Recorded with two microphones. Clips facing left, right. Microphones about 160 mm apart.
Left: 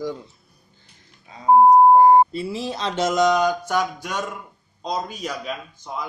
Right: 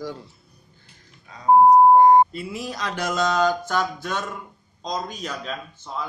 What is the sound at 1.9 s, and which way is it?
A man's voice, 30° left (ahead or behind).